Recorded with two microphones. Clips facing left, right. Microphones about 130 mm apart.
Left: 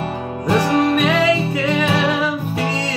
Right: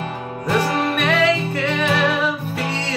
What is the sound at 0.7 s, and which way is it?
Music, 15° left (ahead or behind).